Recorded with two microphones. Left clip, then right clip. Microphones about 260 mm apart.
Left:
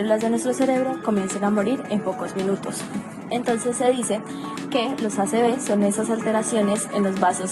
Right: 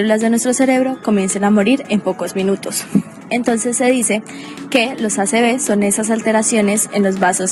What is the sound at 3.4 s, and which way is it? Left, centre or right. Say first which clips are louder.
A woman's voice: right 5 dB; right.